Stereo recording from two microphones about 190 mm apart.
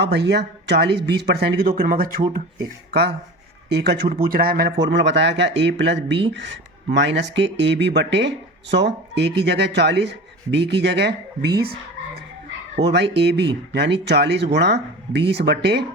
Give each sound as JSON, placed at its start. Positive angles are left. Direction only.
{"t": 0.0, "sound": "speech", "side_deg": -65}
{"t": 3.7, "sound": "speech", "side_deg": -60}
{"t": 12.8, "sound": "speech", "side_deg": -65}